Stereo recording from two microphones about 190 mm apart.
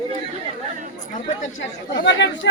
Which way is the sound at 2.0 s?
70° left (ahead or behind).